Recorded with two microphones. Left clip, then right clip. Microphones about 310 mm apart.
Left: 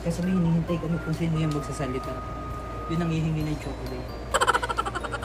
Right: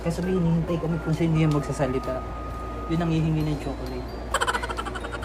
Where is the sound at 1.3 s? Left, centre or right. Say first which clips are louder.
Right 4 dB; right.